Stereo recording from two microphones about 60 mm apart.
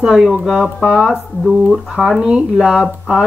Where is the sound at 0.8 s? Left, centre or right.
Centre.